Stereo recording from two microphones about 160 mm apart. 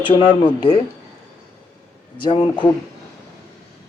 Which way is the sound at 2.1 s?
30° left (ahead or behind).